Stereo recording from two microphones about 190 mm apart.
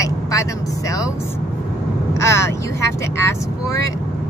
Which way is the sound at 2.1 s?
15° left (ahead or behind).